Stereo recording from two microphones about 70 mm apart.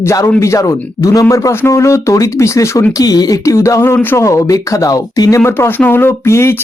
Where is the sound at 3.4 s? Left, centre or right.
Left.